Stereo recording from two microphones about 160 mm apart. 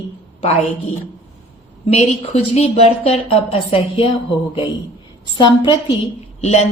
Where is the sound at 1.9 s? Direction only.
40° left (ahead or behind).